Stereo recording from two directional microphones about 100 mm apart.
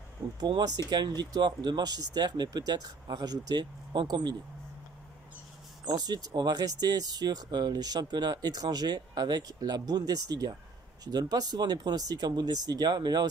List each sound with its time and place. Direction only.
0.4 s speech: 45° right (ahead or behind)
5.9 s speech: 40° right (ahead or behind)